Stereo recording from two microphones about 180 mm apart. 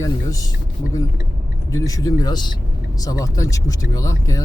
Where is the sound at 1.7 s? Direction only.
20° left (ahead or behind).